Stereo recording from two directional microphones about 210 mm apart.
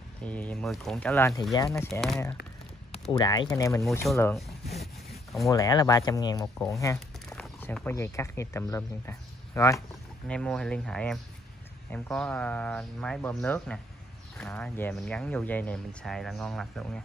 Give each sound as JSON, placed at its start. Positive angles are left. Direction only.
{"t": 0.2, "sound": "speech", "side_deg": 5}
{"t": 1.9, "sound": "speech", "side_deg": 0}
{"t": 2.9, "sound": "speech", "side_deg": 20}
{"t": 4.1, "sound": "speech", "side_deg": 0}
{"t": 5.1, "sound": "rub", "side_deg": 0}
{"t": 5.5, "sound": "speech", "side_deg": 15}
{"t": 7.3, "sound": "speech", "side_deg": 5}